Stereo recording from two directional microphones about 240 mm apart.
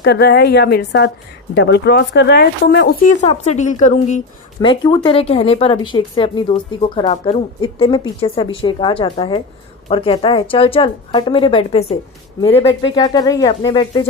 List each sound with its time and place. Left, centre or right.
0.0 s a woman's voice: left
3.2 s speech: left
4.6 s speech: centre